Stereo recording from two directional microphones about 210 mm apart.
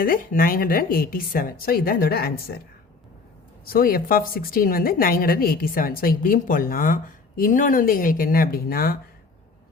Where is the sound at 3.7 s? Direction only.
45° left (ahead or behind).